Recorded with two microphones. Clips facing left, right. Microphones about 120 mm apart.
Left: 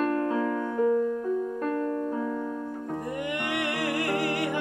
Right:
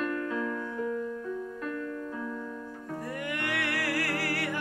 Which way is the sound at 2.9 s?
20° left (ahead or behind).